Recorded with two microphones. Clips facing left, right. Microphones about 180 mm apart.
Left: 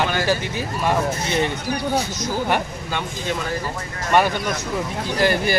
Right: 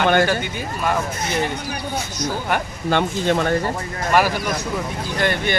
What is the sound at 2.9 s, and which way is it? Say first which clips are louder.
Speech: right 9 dB; 65° right (ahead or behind).